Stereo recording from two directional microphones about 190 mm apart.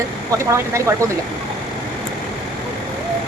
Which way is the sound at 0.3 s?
15° right (ahead or behind).